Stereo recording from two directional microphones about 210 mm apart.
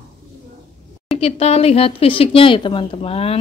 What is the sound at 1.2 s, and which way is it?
Speech, 30° left (ahead or behind).